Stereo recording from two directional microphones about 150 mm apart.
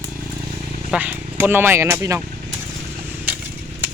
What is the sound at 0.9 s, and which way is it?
Speech, 10° right (ahead or behind).